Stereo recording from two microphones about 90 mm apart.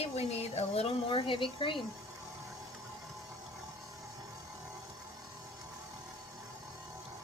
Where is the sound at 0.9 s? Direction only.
75° left (ahead or behind).